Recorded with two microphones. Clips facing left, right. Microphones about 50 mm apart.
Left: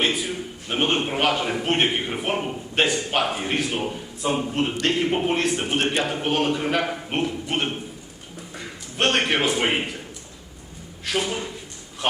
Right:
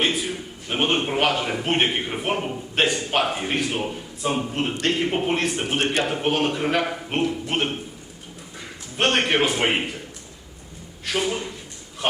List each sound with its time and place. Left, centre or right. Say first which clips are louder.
0.7 s a man's voice: right 1 dB; centre
9.0 s a man's voice: right 1 dB; centre
11.0 s speech: right 1 dB; centre